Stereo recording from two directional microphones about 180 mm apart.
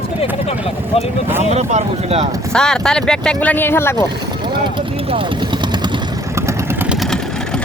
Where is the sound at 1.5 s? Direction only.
35° right (ahead or behind).